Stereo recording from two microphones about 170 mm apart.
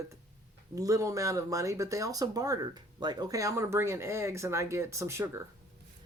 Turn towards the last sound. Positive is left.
turn(degrees=-15)  # may be behind; listen again after turning